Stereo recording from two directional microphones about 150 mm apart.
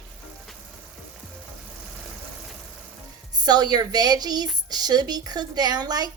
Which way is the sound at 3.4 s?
25° right (ahead or behind).